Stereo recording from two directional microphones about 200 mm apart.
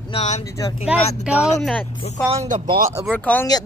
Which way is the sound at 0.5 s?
20° left (ahead or behind).